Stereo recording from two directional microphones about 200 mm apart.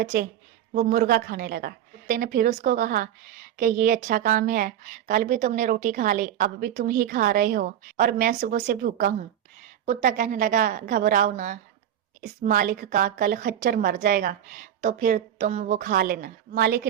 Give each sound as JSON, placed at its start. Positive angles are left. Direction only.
{"t": 0.0, "sound": "a woman's voice", "side_deg": -45}